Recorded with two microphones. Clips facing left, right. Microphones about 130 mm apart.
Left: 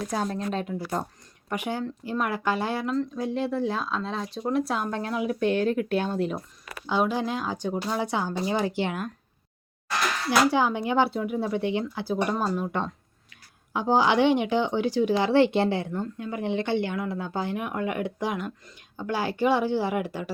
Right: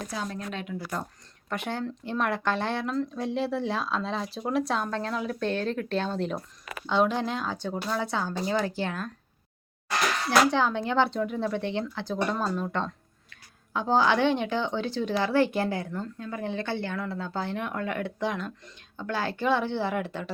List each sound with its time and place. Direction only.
0.3 s speech: 35° left (ahead or behind)
1.5 s speech: 10° left (ahead or behind)
10.5 s speech: 10° left (ahead or behind)